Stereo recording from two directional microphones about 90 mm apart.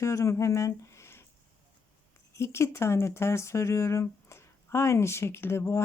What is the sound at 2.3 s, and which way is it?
Speech, 30° left (ahead or behind).